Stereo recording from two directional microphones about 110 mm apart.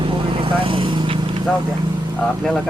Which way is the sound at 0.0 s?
50° right (ahead or behind).